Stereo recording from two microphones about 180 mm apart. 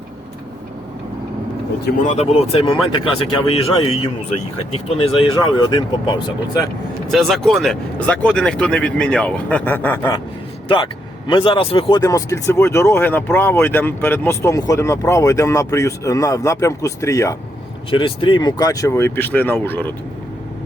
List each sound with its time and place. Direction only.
2.0 s a man's voice: 35° left (ahead or behind)
7.1 s speech: centre (ahead or behind)
11.3 s speech: 30° left (ahead or behind)
17.9 s speech: 30° left (ahead or behind); by 19.9 s 10° left (ahead or behind)